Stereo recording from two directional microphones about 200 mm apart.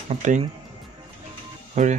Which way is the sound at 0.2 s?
40° right (ahead or behind).